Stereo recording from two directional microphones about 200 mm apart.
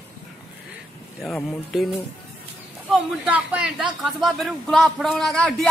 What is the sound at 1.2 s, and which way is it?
Speech, centre (ahead or behind).